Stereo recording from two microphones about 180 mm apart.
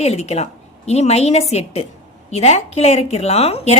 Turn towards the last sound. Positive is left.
turn(degrees=35)  # may be behind; listen again after turning